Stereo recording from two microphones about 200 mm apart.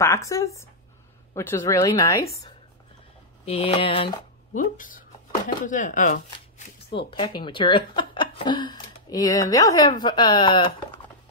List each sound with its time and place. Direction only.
0.0 s a woman's voice: 15° left (ahead or behind)
3.4 s speech: 25° left (ahead or behind)
4.6 s speech: 40° left (ahead or behind)
7.1 s speech: 25° left (ahead or behind)